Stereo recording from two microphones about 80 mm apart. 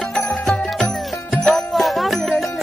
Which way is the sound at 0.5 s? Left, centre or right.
Centre.